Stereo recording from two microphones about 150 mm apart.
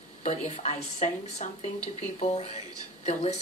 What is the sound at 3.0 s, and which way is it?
Speech, 45° left (ahead or behind).